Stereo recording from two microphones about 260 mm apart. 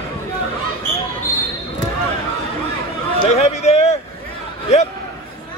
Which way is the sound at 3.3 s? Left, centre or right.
Left.